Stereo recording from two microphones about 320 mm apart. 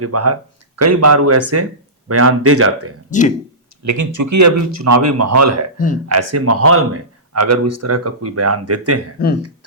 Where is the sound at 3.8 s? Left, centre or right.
Right.